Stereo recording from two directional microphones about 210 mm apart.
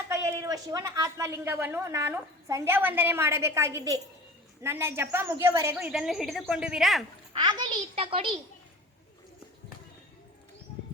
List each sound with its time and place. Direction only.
0.1 s a woman's voice: 15° right (ahead or behind)
7.3 s a child's voice: 20° right (ahead or behind)